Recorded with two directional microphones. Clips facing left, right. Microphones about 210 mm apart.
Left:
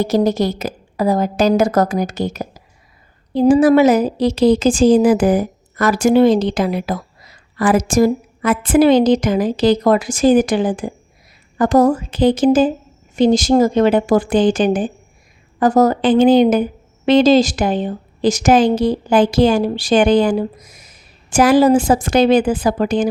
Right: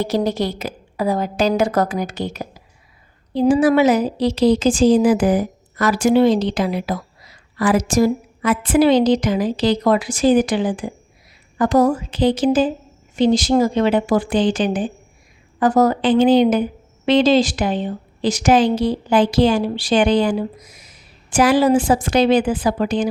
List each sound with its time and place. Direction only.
0.0 s a woman's voice: 45° left (ahead or behind)